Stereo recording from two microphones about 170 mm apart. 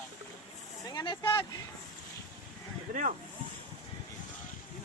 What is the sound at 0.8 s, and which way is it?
Speech, 25° left (ahead or behind).